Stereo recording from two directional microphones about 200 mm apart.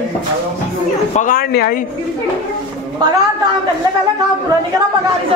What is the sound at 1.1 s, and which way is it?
Speech, 40° left (ahead or behind).